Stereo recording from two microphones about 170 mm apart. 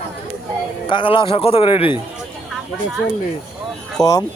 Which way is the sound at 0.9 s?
30° left (ahead or behind).